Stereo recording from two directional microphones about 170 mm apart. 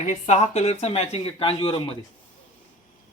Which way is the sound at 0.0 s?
45° left (ahead or behind).